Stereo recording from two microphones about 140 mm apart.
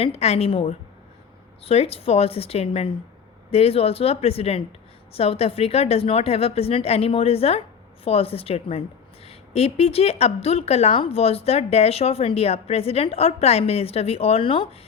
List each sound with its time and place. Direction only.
0.0 s a woman's voice: 45° left (ahead or behind)